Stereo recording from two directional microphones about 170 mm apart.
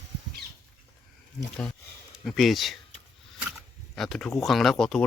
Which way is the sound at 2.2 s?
Centre (ahead or behind).